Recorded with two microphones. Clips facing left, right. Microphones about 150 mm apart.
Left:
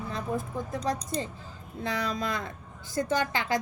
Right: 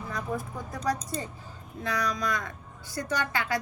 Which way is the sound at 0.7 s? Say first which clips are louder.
Right 1 dB; 25° left (ahead or behind).